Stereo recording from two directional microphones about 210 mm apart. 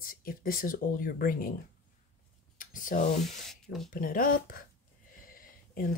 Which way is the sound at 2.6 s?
40° left (ahead or behind).